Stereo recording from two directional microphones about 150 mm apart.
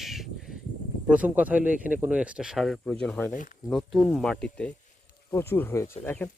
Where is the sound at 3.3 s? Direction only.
60° left (ahead or behind).